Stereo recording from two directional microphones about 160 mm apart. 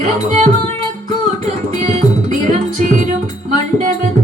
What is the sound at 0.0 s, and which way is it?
Music, 45° right (ahead or behind).